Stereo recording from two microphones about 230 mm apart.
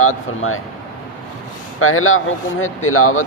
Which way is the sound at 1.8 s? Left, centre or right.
Left.